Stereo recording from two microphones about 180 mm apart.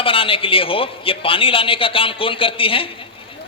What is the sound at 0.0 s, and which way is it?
A man's voice, 30° left (ahead or behind).